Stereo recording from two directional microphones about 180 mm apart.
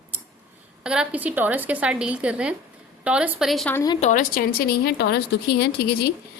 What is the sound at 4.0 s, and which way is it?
A woman's voice, 45° left (ahead or behind).